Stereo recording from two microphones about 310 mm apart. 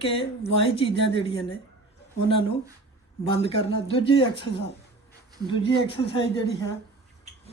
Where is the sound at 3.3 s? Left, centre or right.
Centre.